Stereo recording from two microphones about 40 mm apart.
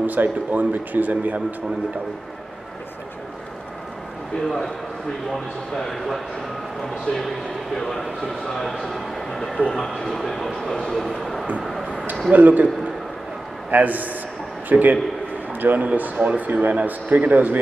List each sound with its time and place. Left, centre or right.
0.0 s speech: right
5.8 s speech: centre
9.7 s speech: centre
10.0 s speech: centre
12.3 s speech: right
13.7 s speech: right
16.0 s speech: right